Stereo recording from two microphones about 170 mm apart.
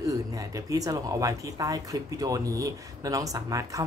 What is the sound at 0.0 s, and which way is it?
Speech, 20° right (ahead or behind).